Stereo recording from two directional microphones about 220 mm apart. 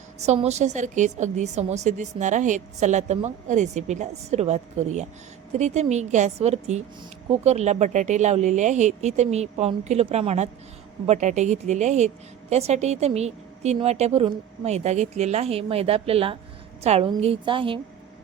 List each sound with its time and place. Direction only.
0.2 s a woman's voice: 30° right (ahead or behind)